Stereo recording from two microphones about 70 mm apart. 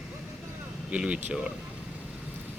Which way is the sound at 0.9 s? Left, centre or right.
Centre.